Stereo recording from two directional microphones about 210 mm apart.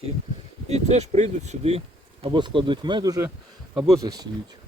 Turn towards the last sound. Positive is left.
turn(degrees=-15)  # may be behind; listen again after turning